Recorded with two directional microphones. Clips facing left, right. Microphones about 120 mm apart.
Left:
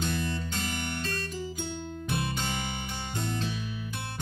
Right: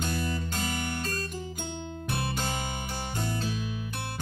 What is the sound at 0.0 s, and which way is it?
Music, 40° right (ahead or behind).